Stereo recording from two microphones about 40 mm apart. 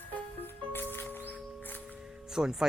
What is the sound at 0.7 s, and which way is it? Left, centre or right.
Music, left.